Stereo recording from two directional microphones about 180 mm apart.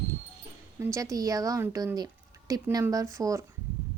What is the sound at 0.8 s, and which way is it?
A woman's voice, 15° right (ahead or behind).